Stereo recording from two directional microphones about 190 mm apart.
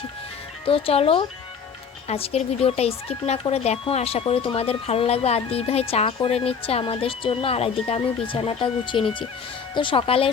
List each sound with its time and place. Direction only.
0.6 s speech: 30° left (ahead or behind)